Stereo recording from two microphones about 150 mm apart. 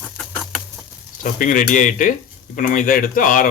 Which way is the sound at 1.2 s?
60° left (ahead or behind).